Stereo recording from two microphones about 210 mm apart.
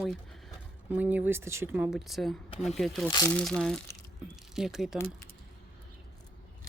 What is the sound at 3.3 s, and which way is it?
Speech, 5° left (ahead or behind).